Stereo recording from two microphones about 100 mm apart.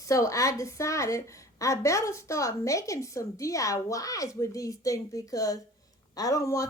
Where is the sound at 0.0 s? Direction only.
35° left (ahead or behind).